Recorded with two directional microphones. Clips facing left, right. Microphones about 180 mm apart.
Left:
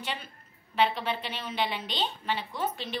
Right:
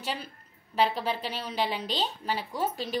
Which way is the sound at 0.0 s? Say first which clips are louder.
Right 2 dB; 35° right (ahead or behind).